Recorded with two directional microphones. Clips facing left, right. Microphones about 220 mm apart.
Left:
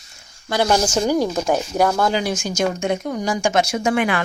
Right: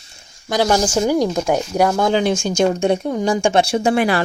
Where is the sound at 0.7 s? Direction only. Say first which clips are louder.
Right 1 dB; 10° right (ahead or behind).